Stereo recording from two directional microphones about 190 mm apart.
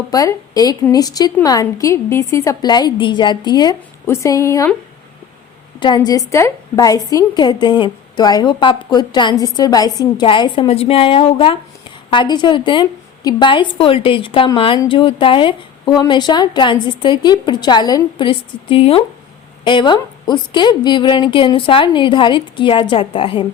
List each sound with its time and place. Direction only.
0.1 s a woman's voice: 20° left (ahead or behind)
5.8 s a woman's voice: 20° left (ahead or behind)